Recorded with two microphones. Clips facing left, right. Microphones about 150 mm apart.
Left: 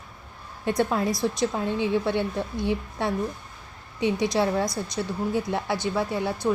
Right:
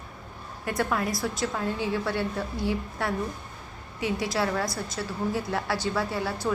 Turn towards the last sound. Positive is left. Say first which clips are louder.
# left 2 dB
turn(degrees=20)  # may be behind; listen again after turning